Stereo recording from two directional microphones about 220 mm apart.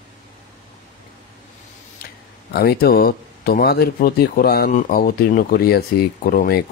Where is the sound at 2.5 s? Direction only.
45° left (ahead or behind).